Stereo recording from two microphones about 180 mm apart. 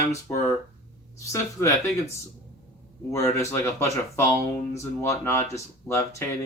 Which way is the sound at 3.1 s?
15° left (ahead or behind).